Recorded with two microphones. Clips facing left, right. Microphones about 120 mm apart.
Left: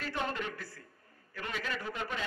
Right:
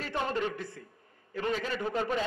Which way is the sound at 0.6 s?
20° right (ahead or behind).